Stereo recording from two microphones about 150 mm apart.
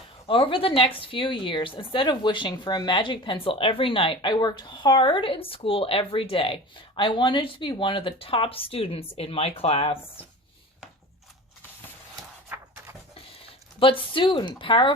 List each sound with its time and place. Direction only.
0.3 s speech: 35° left (ahead or behind)
12.5 s a sound: 15° right (ahead or behind)
13.7 s speech: 35° left (ahead or behind)